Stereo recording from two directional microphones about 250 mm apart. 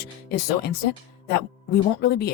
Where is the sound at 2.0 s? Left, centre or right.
Left.